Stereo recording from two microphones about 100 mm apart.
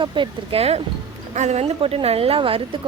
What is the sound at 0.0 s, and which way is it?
Speech, 55° right (ahead or behind).